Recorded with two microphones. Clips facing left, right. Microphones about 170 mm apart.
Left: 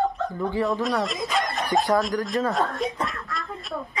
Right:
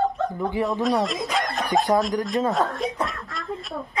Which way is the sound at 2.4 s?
Centre (ahead or behind).